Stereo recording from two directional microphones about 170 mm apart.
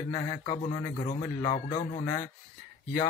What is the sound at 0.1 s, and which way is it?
Speech, 25° left (ahead or behind).